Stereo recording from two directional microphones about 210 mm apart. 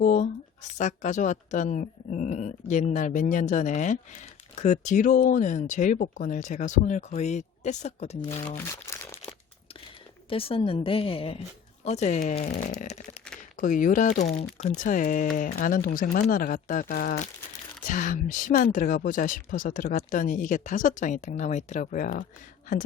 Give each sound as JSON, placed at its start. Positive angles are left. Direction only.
{"t": 0.0, "sound": "a woman's voice", "side_deg": 40}
{"t": 8.4, "sound": "crumpling", "side_deg": 10}
{"t": 10.2, "sound": "a woman's voice", "side_deg": 25}